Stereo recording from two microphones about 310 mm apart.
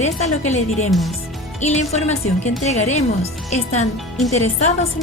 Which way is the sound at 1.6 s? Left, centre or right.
Left.